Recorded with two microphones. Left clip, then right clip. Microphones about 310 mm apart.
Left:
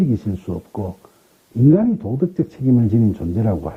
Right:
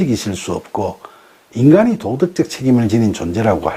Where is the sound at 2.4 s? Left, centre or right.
Centre.